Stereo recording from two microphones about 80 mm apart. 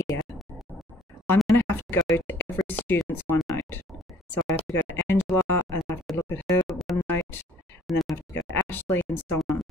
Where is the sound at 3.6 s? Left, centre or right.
Left.